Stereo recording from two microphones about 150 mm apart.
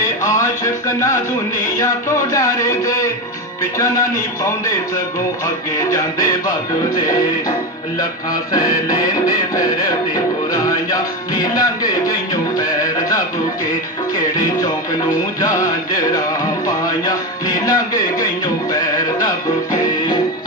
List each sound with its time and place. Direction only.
0.2 s a sound: 20° left (ahead or behind)
3.6 s music: 20° left (ahead or behind)
5.7 s music: 20° left (ahead or behind)
8.5 s music: 25° left (ahead or behind)
15.4 s music: 20° left (ahead or behind)